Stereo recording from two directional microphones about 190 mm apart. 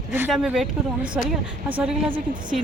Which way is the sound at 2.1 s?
25° right (ahead or behind).